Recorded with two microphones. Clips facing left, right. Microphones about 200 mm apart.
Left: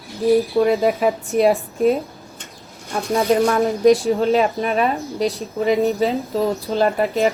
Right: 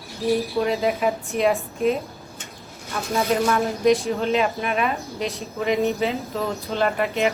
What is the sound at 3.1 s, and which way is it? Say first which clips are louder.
Speech: left 4 dB; 30° left (ahead or behind).